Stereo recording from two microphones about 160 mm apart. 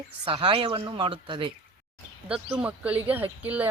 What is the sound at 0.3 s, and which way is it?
Speech, 35° right (ahead or behind).